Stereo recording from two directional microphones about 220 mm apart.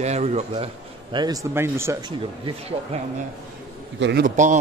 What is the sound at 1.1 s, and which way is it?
Speech, 15° right (ahead or behind).